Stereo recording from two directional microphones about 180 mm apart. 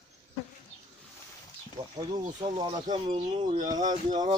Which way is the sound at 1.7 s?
20° right (ahead or behind).